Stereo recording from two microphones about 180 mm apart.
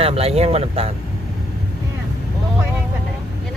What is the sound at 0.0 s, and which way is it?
Speech, 35° right (ahead or behind).